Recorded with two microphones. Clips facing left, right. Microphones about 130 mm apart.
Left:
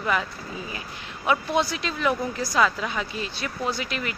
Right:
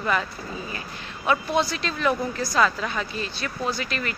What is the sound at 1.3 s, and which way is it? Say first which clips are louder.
A woman's voice: even; 15° left (ahead or behind).